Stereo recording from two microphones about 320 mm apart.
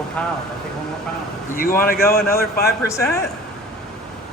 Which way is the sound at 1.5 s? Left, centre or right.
Left.